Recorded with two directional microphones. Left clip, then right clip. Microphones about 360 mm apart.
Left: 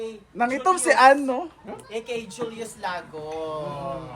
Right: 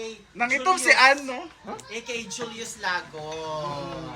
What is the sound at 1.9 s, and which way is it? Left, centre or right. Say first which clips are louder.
A man's voice: left 3 dB; left.